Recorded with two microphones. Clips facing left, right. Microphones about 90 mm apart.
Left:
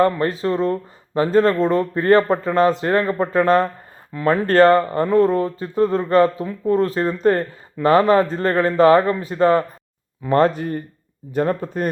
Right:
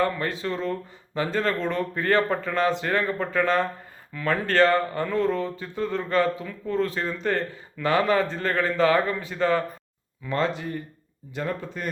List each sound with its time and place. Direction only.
0.0 s speech: 40° left (ahead or behind)